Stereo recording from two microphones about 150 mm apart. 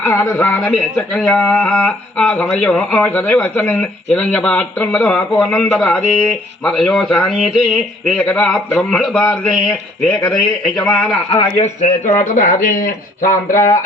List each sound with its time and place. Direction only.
0.0 s speech: 15° left (ahead or behind)
10.1 s speech: 25° left (ahead or behind)
10.8 s speech: 5° left (ahead or behind)
11.3 s speech: 30° left (ahead or behind)
12.1 s speech: 55° left (ahead or behind)
13.2 s speech: 20° left (ahead or behind)